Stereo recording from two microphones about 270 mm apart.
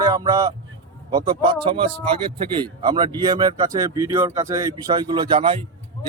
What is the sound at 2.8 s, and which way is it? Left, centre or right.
Speech, centre.